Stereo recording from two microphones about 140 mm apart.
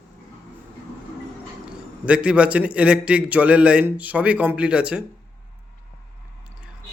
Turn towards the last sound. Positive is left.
turn(degrees=-5)  # may be behind; listen again after turning